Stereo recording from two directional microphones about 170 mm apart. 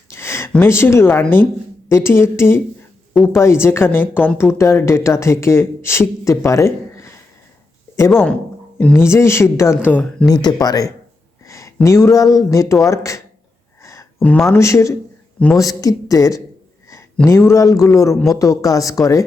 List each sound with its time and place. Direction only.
0.1 s a sound: 15° left (ahead or behind)
0.5 s speech: 15° left (ahead or behind)
8.1 s speech: 5° left (ahead or behind)
10.2 s speech: 20° left (ahead or behind)
13.8 s a sound: 15° left (ahead or behind)
14.3 s speech: 5° left (ahead or behind)
14.6 s speech: 15° left (ahead or behind)
17.5 s speech: 20° left (ahead or behind)